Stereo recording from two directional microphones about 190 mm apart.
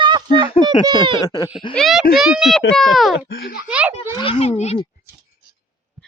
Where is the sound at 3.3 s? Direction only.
55° left (ahead or behind).